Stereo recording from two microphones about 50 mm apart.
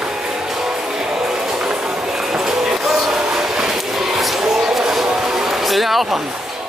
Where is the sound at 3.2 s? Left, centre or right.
Centre.